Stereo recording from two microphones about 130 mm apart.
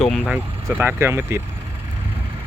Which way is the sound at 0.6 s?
20° right (ahead or behind).